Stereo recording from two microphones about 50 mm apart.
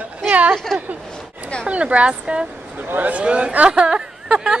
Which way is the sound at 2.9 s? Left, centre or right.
Right.